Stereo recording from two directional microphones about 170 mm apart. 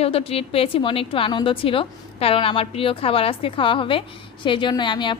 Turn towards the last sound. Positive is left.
turn(degrees=25)  # may be behind; listen again after turning